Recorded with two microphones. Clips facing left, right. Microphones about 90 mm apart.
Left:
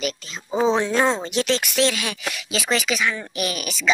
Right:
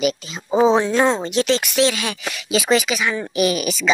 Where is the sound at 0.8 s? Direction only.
Centre (ahead or behind).